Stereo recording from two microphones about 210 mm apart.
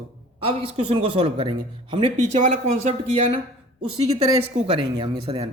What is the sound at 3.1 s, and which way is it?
Speech, 30° right (ahead or behind).